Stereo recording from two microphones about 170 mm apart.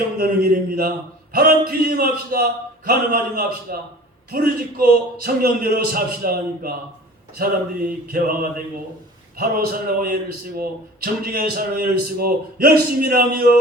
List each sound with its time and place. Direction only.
0.2 s a man's voice: 60° right (ahead or behind)